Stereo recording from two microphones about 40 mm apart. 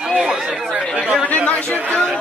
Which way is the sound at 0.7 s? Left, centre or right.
Right.